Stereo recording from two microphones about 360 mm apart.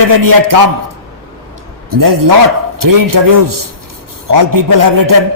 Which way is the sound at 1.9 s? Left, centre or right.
Right.